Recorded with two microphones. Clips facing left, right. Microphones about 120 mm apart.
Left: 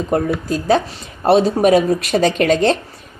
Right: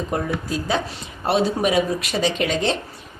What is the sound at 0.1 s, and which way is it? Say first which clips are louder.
A woman's voice: left 9 dB; 45° left (ahead or behind).